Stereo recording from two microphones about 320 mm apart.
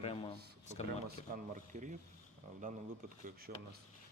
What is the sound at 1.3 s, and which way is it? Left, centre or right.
Speech, right.